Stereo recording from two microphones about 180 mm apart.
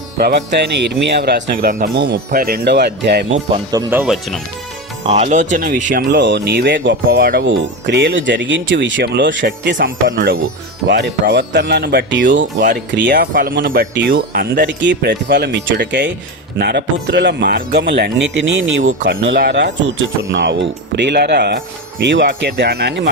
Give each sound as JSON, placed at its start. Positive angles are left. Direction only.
{"t": 0.2, "sound": "speech", "side_deg": -65}
{"t": 2.0, "sound": "speech", "side_deg": -70}
{"t": 3.7, "sound": "speech", "side_deg": -15}
{"t": 5.0, "sound": "speech", "side_deg": -35}
{"t": 6.1, "sound": "speech", "side_deg": -75}
{"t": 7.2, "sound": "speech", "side_deg": -55}
{"t": 7.4, "sound": "speech", "side_deg": -90}
{"t": 9.0, "sound": "speech", "side_deg": -70}
{"t": 9.7, "sound": "speech", "side_deg": -50}
{"t": 10.8, "sound": "speech", "side_deg": -70}
{"t": 12.9, "sound": "speech", "side_deg": -70}
{"t": 13.7, "sound": "speech", "side_deg": -70}
{"t": 19.0, "sound": "speech", "side_deg": -60}
{"t": 20.3, "sound": "speech", "side_deg": -90}